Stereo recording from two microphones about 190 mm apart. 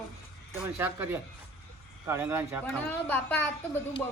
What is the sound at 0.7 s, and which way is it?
A man's voice, 10° right (ahead or behind).